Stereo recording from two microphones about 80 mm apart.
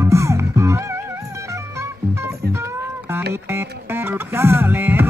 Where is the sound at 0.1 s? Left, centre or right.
Right.